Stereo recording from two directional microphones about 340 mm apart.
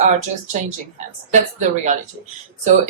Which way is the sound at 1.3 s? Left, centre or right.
Right.